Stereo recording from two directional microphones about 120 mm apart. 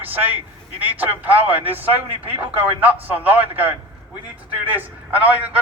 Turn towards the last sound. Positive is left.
turn(degrees=-15)  # may be behind; listen again after turning